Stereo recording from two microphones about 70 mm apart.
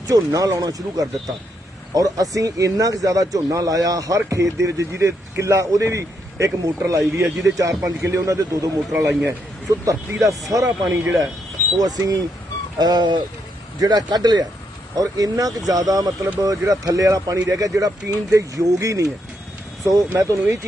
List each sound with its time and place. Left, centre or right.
0.1 s speech: right
9.6 s speech: right
11.8 s speech: right
12.8 s speech: right
13.7 s speech: right
14.9 s speech: right